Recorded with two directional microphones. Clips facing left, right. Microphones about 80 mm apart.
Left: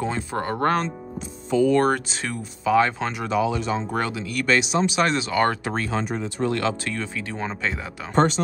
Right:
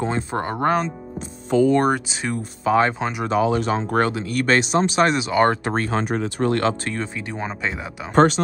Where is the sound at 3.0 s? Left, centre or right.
Centre.